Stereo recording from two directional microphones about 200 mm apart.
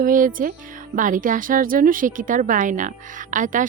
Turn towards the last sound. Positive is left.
turn(degrees=-40)  # may be behind; listen again after turning